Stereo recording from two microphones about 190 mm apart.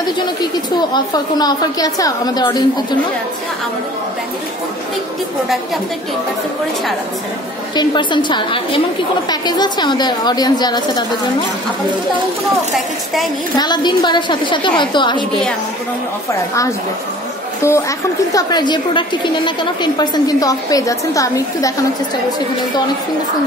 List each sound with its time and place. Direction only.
0.4 s a woman's voice: 20° left (ahead or behind)
7.7 s a woman's voice: 25° left (ahead or behind)
12.7 s a woman's voice: centre (ahead or behind)
13.6 s a woman's voice: 25° left (ahead or behind)
17.6 s a woman's voice: 15° left (ahead or behind)